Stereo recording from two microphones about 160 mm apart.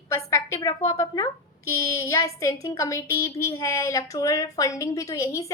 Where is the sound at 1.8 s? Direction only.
20° left (ahead or behind).